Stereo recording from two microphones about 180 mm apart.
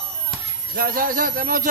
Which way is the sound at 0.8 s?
50° right (ahead or behind).